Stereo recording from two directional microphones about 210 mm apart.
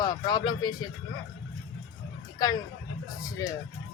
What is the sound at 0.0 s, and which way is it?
Speech, 20° left (ahead or behind).